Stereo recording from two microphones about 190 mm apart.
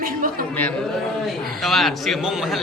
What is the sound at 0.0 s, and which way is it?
Speech, 50° right (ahead or behind).